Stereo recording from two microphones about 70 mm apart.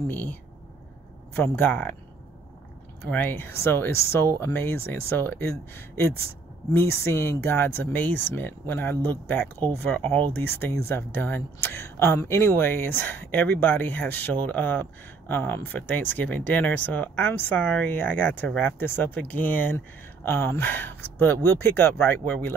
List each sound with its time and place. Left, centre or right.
0.1 s speech: left
3.0 s speech: left
20.2 s speech: left